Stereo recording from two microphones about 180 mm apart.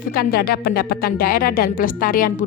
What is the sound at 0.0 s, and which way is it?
A woman's voice, 55° left (ahead or behind).